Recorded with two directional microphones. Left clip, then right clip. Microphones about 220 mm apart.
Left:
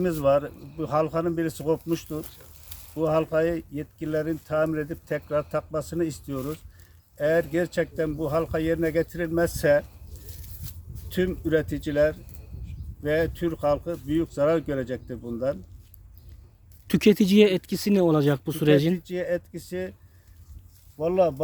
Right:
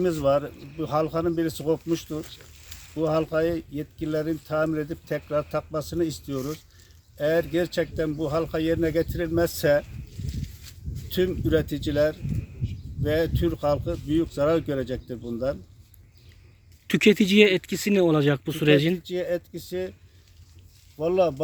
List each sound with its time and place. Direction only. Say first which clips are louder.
0.0 s speech: even; centre (ahead or behind)
2.2 s sizzle: right 4 dB; 50° left (ahead or behind)
2.9 s speech: left 1 dB; centre (ahead or behind)
10.3 s a sound: right 6 dB; 50° left (ahead or behind)
11.1 s speech: right 1 dB; centre (ahead or behind)
16.8 s speech: right 1 dB; 10° left (ahead or behind)
18.9 s speech: even; centre (ahead or behind)
21.0 s speech: even; centre (ahead or behind)